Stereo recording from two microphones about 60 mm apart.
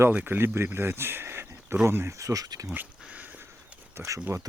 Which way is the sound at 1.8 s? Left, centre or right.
Right.